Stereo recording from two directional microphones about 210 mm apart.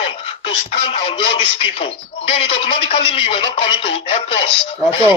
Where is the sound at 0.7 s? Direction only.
30° left (ahead or behind).